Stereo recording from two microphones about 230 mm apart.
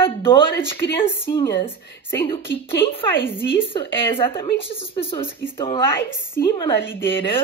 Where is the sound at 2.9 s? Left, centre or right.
Left.